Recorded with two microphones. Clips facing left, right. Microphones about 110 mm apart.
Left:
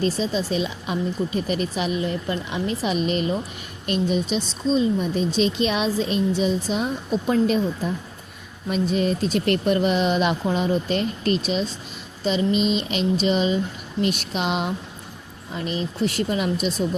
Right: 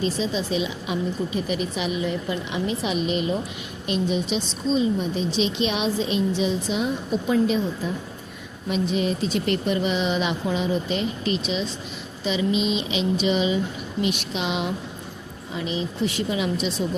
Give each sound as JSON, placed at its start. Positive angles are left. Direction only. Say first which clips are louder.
{"t": 0.0, "sound": "speech", "louder": "left 2 dB", "side_deg": 40}